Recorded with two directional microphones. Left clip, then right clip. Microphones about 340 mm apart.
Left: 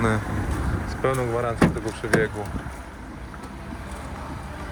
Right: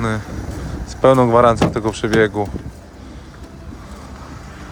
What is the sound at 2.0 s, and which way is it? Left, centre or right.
Speech, right.